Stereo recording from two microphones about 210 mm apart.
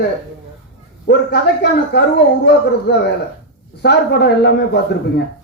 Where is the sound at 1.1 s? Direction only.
55° left (ahead or behind).